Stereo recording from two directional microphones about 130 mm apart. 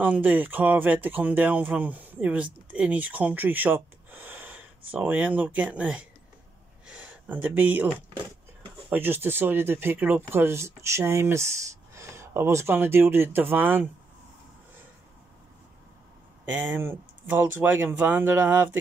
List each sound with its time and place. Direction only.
0.0 s speech: 10° right (ahead or behind)
6.9 s a sound: 10° right (ahead or behind)
8.9 s speech: 15° right (ahead or behind)
16.4 s speech: 15° right (ahead or behind)